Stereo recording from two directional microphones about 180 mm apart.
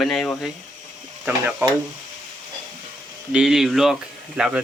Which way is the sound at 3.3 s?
Centre (ahead or behind).